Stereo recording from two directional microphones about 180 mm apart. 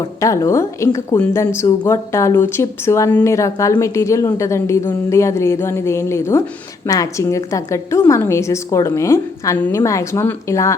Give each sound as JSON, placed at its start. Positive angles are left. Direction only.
{"t": 0.2, "sound": "a woman's voice", "side_deg": 15}